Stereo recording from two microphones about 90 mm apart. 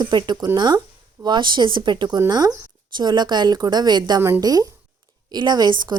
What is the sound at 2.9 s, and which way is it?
Speech, 55° right (ahead or behind).